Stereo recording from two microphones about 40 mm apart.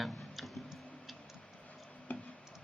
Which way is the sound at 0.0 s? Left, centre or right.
Centre.